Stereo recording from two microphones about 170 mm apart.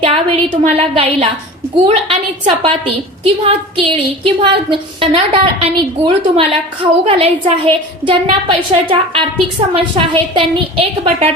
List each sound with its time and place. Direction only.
0.0 s a woman's voice: 35° right (ahead or behind)